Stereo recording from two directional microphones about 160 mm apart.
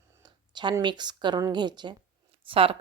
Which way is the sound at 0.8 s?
25° right (ahead or behind).